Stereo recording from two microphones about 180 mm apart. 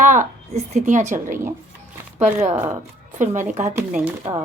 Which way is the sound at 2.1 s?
40° right (ahead or behind).